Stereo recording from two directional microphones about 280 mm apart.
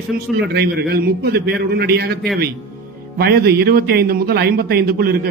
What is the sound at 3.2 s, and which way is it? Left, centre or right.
A man's voice, right.